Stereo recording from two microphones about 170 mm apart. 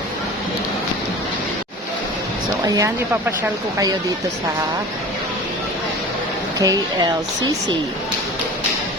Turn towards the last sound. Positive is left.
turn(degrees=-25)  # may be behind; listen again after turning